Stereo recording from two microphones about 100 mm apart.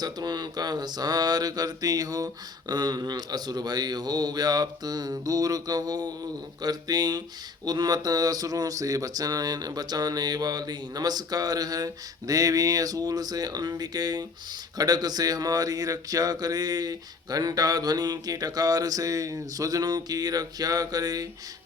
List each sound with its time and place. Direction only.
0.0 s speech: 45° right (ahead or behind)